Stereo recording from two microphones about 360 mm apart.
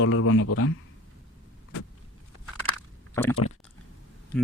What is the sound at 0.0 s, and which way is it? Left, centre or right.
Speech, left.